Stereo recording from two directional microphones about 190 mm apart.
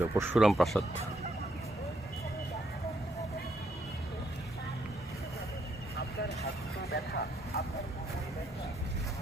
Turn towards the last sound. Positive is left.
turn(degrees=55)  # may be behind; listen again after turning